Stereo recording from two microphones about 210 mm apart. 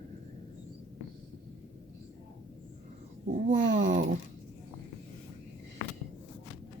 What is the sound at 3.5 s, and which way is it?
Babbling, 35° right (ahead or behind).